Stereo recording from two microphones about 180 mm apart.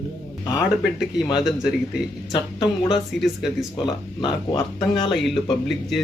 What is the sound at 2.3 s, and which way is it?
Speech, 25° left (ahead or behind).